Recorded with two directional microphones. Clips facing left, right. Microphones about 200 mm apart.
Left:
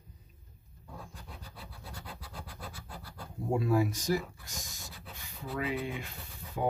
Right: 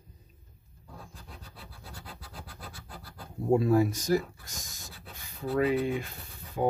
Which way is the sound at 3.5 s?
40° right (ahead or behind).